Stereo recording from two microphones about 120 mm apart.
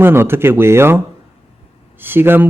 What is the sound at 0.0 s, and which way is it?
A man's voice, 20° right (ahead or behind).